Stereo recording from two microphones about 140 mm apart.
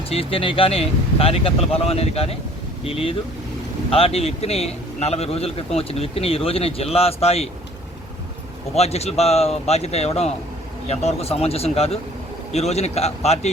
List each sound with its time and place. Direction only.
0.1 s a man's voice: 40° left (ahead or behind)
8.7 s a man's voice: 50° left (ahead or behind)